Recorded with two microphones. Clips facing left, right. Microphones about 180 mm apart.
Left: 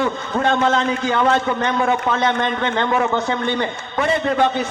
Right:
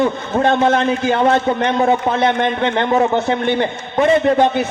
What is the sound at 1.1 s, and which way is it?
A man's voice, 20° right (ahead or behind).